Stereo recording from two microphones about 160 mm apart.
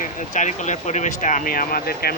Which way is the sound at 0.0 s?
50° left (ahead or behind).